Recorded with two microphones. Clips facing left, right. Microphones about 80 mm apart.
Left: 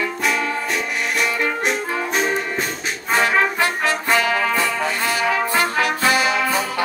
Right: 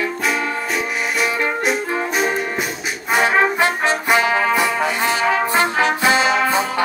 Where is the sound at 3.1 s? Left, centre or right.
Right.